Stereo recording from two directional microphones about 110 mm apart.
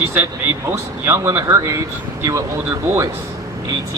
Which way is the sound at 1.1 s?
25° right (ahead or behind).